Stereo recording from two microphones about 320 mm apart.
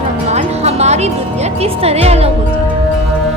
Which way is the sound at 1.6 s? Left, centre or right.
Centre.